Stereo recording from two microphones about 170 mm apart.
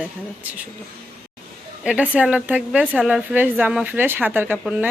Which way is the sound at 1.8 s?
5° right (ahead or behind).